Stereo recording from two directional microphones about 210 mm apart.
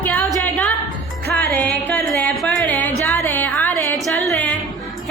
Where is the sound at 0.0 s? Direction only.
10° left (ahead or behind).